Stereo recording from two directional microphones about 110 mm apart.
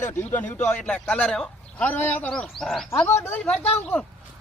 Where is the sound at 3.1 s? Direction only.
20° left (ahead or behind).